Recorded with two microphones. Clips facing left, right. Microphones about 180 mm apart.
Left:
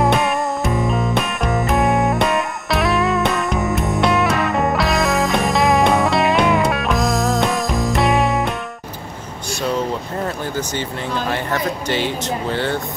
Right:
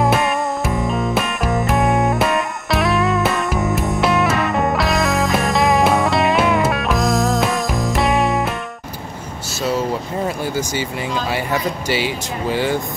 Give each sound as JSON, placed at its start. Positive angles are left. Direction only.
{"t": 0.0, "sound": "music", "side_deg": 0}
{"t": 9.5, "sound": "air conditioning", "side_deg": -5}
{"t": 10.2, "sound": "speech", "side_deg": -10}